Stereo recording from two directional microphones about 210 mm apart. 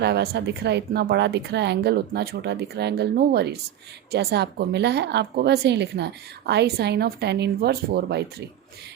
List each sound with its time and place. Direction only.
0.0 s a woman's voice: 50° right (ahead or behind)